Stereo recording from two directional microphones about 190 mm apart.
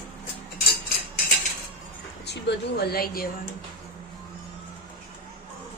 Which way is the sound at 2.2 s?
65° left (ahead or behind).